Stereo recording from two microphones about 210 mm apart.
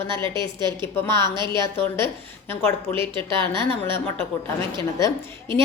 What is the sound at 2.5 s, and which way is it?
Speech, 10° left (ahead or behind).